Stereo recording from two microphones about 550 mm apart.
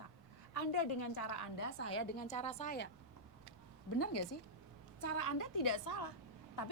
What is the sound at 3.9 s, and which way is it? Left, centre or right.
A woman's voice, left.